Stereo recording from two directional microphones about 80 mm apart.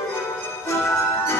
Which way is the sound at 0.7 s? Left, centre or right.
Left.